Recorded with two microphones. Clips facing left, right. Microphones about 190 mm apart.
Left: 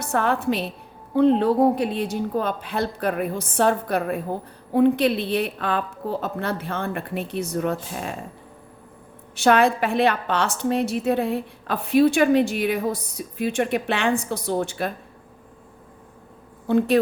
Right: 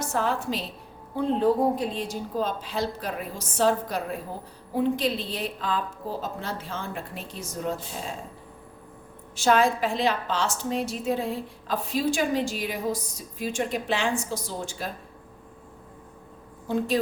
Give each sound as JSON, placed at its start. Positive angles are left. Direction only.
{"t": 0.0, "sound": "a woman's voice", "side_deg": 60}
{"t": 9.3, "sound": "a woman's voice", "side_deg": 65}
{"t": 16.6, "sound": "a woman's voice", "side_deg": 65}